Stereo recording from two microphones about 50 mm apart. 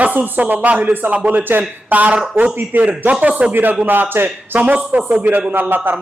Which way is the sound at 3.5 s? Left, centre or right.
Right.